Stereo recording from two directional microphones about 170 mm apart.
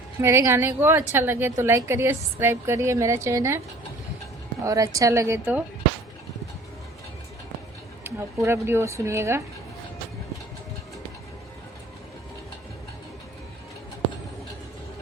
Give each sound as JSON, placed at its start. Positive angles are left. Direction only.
{"t": 0.2, "sound": "a woman's voice", "side_deg": -15}
{"t": 4.6, "sound": "a woman's voice", "side_deg": -20}
{"t": 8.0, "sound": "a woman's voice", "side_deg": -15}